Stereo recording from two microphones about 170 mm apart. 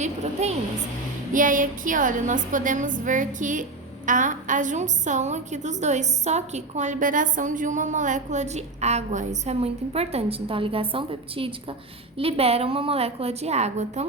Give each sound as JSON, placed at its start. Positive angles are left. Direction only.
{"t": 0.0, "sound": "a woman's voice", "side_deg": -40}